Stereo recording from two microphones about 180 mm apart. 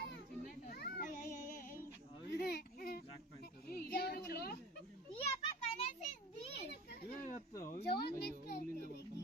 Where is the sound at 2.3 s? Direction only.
60° left (ahead or behind).